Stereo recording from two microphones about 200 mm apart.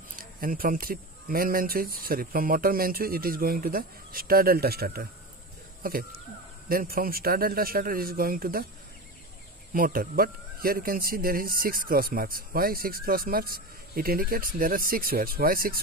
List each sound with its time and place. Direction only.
0.2 s speech: 45° right (ahead or behind)
9.8 s speech: 45° right (ahead or behind)